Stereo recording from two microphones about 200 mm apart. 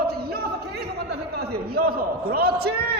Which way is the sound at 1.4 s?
50° right (ahead or behind).